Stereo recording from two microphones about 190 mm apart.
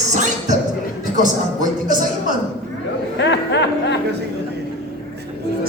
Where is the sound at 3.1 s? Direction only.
65° left (ahead or behind).